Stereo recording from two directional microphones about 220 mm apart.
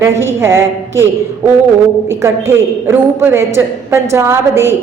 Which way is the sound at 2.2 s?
10° right (ahead or behind).